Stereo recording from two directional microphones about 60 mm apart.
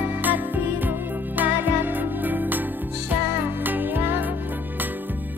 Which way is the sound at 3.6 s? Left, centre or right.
Right.